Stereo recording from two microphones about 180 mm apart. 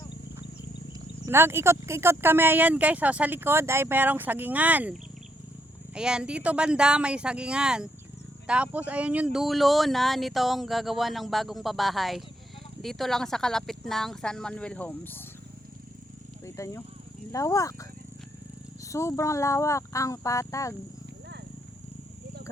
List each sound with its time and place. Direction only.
1.2 s speech: 15° right (ahead or behind); by 15.2 s 10° left (ahead or behind)
16.6 s speech: 15° left (ahead or behind)
18.9 s speech: 15° left (ahead or behind)